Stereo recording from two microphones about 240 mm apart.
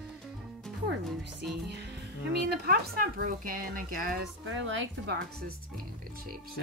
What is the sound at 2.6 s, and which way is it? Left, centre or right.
Speech, right.